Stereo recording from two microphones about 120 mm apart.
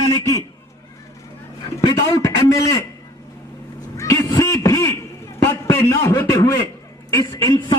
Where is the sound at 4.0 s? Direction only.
25° left (ahead or behind).